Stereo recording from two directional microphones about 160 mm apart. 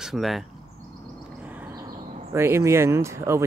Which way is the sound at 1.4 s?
10° right (ahead or behind).